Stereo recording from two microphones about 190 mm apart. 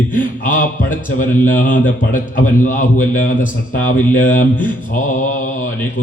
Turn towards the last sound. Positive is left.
turn(degrees=45)  # may be behind; listen again after turning